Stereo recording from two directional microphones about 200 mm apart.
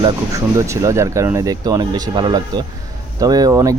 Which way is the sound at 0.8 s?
15° right (ahead or behind).